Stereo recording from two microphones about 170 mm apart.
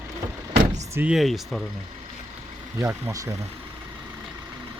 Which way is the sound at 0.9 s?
5° right (ahead or behind).